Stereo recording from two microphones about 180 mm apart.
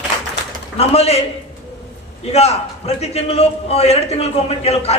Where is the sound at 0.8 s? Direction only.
35° left (ahead or behind).